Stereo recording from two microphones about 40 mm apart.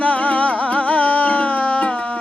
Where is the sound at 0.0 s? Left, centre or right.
Left.